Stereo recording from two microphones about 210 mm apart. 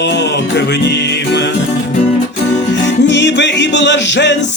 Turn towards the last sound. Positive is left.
turn(degrees=55)  # may be behind; listen again after turning